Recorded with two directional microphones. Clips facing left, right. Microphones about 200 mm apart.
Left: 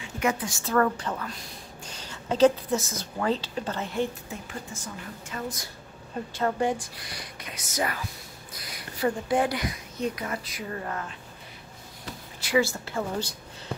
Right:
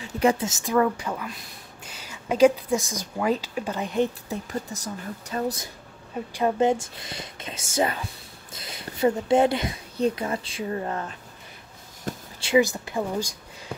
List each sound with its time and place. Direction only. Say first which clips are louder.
0.2 s a woman's voice: right 5 dB; 30° right (ahead or behind)
4.3 s a woman's voice: right 7 dB; 40° right (ahead or behind)
6.1 s speech: right 4 dB; 15° right (ahead or behind)
12.4 s speech: right 4 dB; 20° right (ahead or behind)